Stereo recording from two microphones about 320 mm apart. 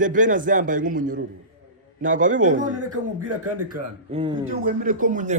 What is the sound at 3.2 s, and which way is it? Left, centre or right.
Speech, right.